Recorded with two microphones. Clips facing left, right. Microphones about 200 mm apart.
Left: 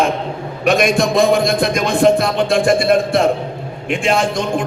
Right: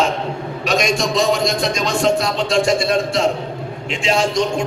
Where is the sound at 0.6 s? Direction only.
55° left (ahead or behind).